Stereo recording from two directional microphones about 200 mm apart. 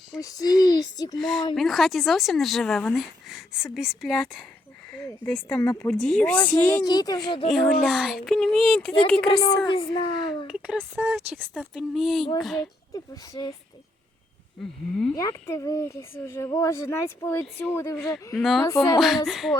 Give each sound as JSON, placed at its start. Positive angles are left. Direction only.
{"t": 0.2, "sound": "speech", "side_deg": 15}
{"t": 1.2, "sound": "speech", "side_deg": 0}
{"t": 6.8, "sound": "speech", "side_deg": 20}
{"t": 7.4, "sound": "speech", "side_deg": 0}
{"t": 9.3, "sound": "speech", "side_deg": 20}
{"t": 10.4, "sound": "speech", "side_deg": -5}
{"t": 12.9, "sound": "speech", "side_deg": 15}
{"t": 14.6, "sound": "speech", "side_deg": 0}
{"t": 15.1, "sound": "speech", "side_deg": 15}
{"t": 18.3, "sound": "speech", "side_deg": 0}
{"t": 18.6, "sound": "speech", "side_deg": 15}
{"t": 18.9, "sound": "speech", "side_deg": 0}